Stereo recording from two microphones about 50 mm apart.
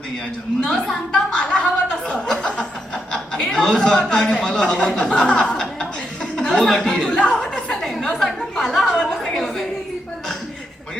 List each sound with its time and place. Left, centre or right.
0.7 s speech: centre
7.1 s chuckle: left
7.3 s a sound: centre